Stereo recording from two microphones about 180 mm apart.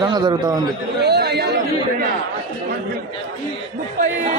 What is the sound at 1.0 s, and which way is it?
Chatter, 65° right (ahead or behind).